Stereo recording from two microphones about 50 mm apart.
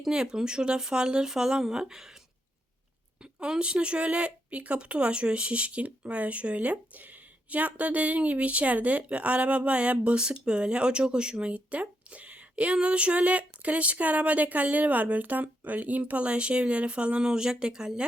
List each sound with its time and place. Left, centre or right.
0.1 s speech: centre
3.4 s a woman's voice: centre